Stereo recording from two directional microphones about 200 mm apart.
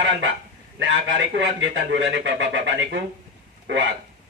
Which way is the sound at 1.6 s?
70° right (ahead or behind).